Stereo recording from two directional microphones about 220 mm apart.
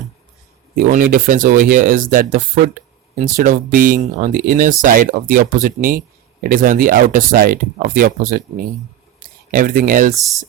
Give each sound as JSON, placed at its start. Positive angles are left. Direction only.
{"t": 0.8, "sound": "speech", "side_deg": -40}
{"t": 9.5, "sound": "speech", "side_deg": -40}